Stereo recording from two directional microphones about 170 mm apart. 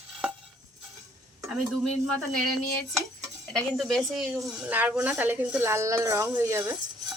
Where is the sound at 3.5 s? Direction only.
Centre (ahead or behind).